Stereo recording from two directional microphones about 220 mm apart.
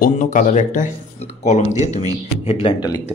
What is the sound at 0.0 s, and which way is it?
Speech, 35° left (ahead or behind).